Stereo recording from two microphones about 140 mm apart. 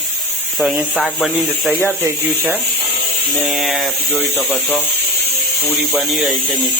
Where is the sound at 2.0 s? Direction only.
15° right (ahead or behind).